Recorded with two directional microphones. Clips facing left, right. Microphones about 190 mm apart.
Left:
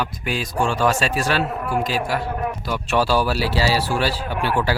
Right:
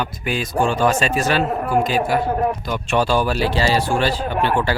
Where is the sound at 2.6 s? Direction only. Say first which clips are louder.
Right 1 dB; 5° left (ahead or behind).